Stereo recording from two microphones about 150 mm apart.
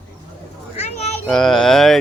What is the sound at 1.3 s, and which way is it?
Speech, 5° left (ahead or behind).